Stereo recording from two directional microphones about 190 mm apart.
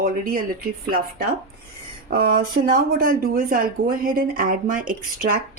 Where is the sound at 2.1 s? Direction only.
50° right (ahead or behind).